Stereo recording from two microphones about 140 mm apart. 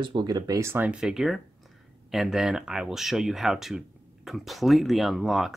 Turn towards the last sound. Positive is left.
turn(degrees=0)  # may be behind; listen again after turning